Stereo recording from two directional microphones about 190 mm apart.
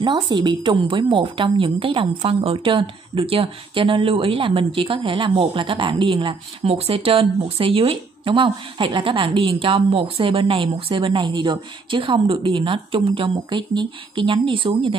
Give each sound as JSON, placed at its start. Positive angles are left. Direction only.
{"t": 0.0, "sound": "a woman's voice", "side_deg": -25}